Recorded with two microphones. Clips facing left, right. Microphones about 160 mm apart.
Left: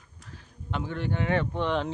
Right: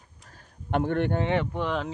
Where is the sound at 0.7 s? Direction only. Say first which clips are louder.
Right 7 dB; 55° right (ahead or behind).